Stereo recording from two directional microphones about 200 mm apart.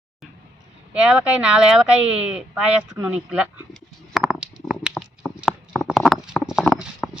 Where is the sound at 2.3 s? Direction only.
5° right (ahead or behind).